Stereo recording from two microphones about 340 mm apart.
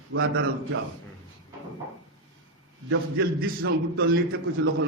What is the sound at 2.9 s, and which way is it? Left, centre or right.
A man's voice, right.